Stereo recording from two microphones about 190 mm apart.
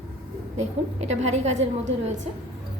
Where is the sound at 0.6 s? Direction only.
35° right (ahead or behind).